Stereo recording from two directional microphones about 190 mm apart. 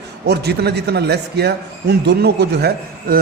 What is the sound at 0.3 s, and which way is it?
A man's voice, 60° right (ahead or behind).